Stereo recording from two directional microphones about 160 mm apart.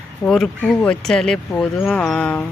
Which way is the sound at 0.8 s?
5° left (ahead or behind).